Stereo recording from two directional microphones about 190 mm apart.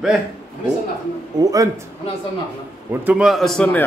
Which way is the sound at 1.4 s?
20° right (ahead or behind).